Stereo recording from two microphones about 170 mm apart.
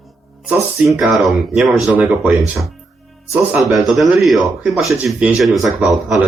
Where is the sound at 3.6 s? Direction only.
Centre (ahead or behind).